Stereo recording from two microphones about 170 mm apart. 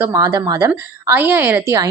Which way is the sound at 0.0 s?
20° right (ahead or behind).